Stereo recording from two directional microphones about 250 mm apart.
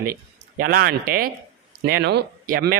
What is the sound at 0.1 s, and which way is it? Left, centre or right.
A man's voice, right.